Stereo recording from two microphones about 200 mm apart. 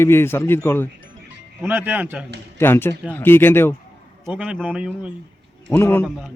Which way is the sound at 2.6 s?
10° left (ahead or behind).